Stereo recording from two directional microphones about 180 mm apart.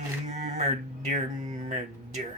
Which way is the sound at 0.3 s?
40° right (ahead or behind).